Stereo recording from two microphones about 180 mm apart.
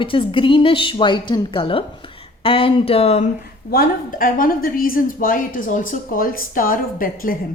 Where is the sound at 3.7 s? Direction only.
55° left (ahead or behind).